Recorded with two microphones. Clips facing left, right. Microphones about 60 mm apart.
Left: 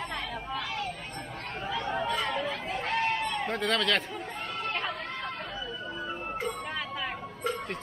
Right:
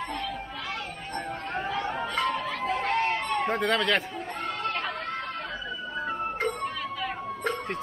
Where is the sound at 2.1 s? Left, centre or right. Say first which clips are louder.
Right 3 dB; right.